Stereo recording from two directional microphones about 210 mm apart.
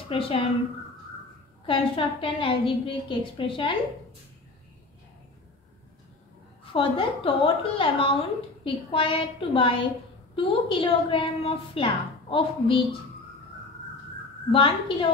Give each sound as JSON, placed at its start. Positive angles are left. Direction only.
{"t": 0.1, "sound": "a woman's voice", "side_deg": 25}
{"t": 1.7, "sound": "a woman's voice", "side_deg": 25}
{"t": 6.6, "sound": "a woman's voice", "side_deg": 25}
{"t": 14.5, "sound": "a woman's voice", "side_deg": 25}